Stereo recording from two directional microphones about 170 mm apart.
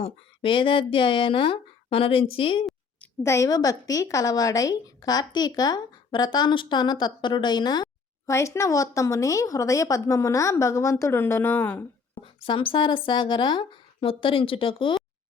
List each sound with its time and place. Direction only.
0.0 s speech: 30° left (ahead or behind)
3.2 s a woman's voice: 20° left (ahead or behind)
12.1 s speech: 30° left (ahead or behind)